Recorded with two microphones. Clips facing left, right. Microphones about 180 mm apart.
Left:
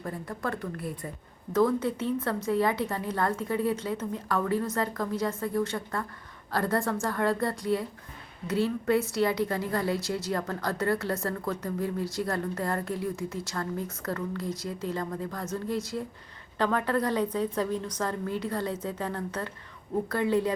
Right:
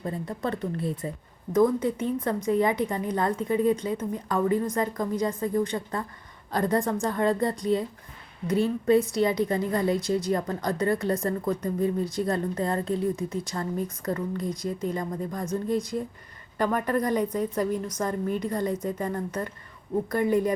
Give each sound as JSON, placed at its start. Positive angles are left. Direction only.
{"t": 0.0, "sound": "a woman's voice", "side_deg": -20}